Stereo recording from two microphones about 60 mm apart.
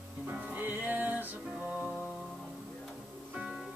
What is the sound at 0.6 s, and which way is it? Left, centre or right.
Music, right.